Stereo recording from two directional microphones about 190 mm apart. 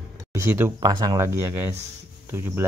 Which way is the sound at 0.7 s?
20° right (ahead or behind).